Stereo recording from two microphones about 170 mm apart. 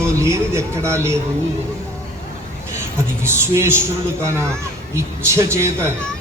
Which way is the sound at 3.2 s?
15° right (ahead or behind).